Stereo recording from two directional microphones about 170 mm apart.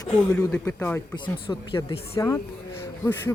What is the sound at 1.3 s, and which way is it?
Speech, 30° left (ahead or behind).